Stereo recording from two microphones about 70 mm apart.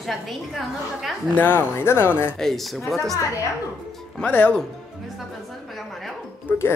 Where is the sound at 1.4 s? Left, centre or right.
Left.